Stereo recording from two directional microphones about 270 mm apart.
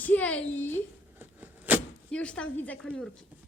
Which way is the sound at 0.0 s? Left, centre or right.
Centre.